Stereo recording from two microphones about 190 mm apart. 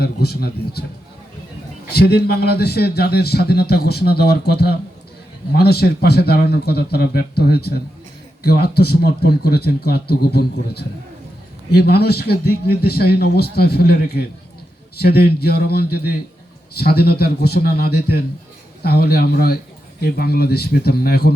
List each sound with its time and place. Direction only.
0.0 s a man's voice: 55° left (ahead or behind)
1.9 s a man's voice: 55° left (ahead or behind)